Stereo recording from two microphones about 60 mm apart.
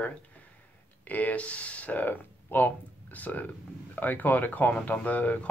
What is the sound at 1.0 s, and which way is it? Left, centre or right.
Speech, left.